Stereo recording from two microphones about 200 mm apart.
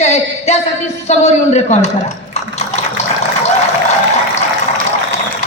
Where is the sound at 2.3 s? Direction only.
35° left (ahead or behind).